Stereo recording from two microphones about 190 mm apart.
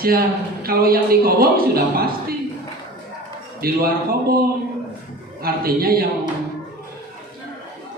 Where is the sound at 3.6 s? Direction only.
50° right (ahead or behind).